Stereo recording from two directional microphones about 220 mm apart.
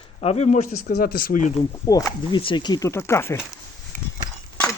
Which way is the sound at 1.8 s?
15° left (ahead or behind).